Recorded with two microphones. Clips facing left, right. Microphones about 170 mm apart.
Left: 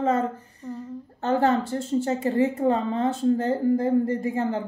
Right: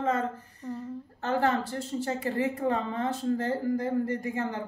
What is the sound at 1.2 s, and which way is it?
A woman's voice, 30° left (ahead or behind).